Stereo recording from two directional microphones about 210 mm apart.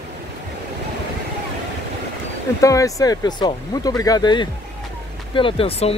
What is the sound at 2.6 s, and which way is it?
Speech, 15° left (ahead or behind).